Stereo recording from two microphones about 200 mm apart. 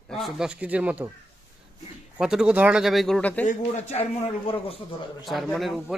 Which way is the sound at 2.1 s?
5° right (ahead or behind).